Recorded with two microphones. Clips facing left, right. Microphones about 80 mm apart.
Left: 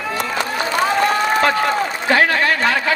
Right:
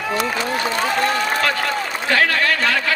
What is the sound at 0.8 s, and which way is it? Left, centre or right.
A man's voice, left.